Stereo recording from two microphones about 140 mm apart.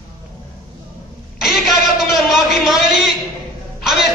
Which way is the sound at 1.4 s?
Centre (ahead or behind).